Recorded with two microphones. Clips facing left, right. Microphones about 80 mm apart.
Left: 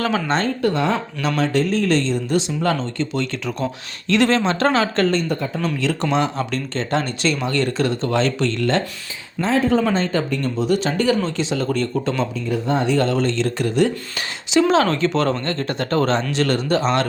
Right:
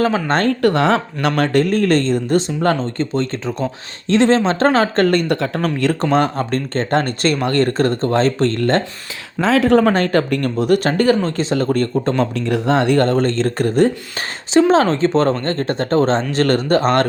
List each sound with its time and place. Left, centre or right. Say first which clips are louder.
0.3 s speech: right 4 dB; right
1.4 s speech: right 4 dB; right
5.0 s speech: right 4 dB; right
9.5 s speech: right 5 dB; right
12.5 s speech: right 4 dB; right
16.3 s speech: right 4 dB; right